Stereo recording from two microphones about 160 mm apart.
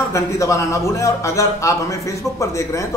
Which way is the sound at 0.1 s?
20° left (ahead or behind).